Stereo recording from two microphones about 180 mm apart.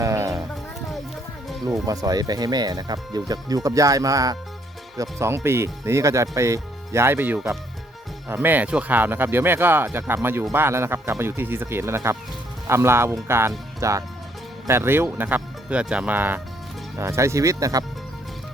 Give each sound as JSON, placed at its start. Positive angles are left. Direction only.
{"t": 0.0, "sound": "music", "side_deg": -15}
{"t": 1.9, "sound": "speech", "side_deg": -20}